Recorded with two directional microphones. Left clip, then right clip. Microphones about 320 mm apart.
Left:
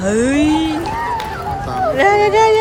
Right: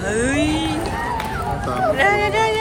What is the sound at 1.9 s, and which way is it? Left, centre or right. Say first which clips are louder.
Speech: left 7 dB; centre.